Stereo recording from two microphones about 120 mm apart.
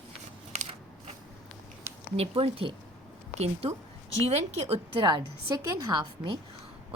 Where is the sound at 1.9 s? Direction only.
20° right (ahead or behind).